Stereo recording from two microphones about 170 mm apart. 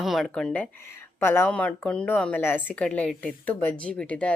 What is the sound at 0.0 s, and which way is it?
Speech, centre (ahead or behind).